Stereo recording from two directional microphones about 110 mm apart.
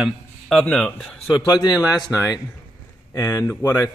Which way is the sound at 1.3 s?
35° left (ahead or behind).